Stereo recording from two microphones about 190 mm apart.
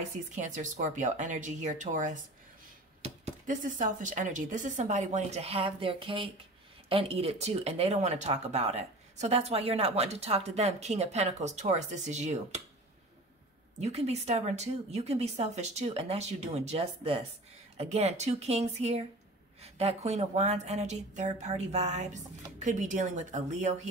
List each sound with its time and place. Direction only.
0.4 s speech: 40° right (ahead or behind)
13.7 s speech: 35° right (ahead or behind)